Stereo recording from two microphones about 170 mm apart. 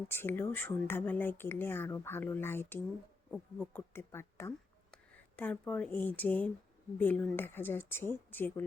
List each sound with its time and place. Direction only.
0.1 s speech: 15° left (ahead or behind)